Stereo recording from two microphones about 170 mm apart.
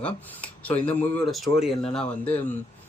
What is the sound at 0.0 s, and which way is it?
Speech, 5° left (ahead or behind).